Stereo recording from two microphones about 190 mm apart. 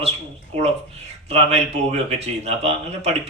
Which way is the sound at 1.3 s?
35° right (ahead or behind).